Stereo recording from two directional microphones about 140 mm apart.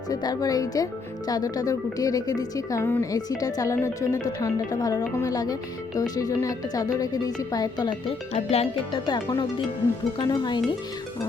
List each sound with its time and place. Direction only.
0.1 s speech: 25° left (ahead or behind)
8.3 s speech: 50° left (ahead or behind)
9.0 s speech: 30° left (ahead or behind)